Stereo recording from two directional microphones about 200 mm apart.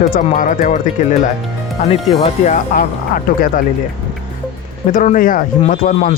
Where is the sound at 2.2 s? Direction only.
35° left (ahead or behind).